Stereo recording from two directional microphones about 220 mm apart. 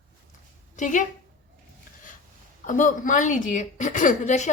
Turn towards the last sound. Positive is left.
turn(degrees=35)  # may be behind; listen again after turning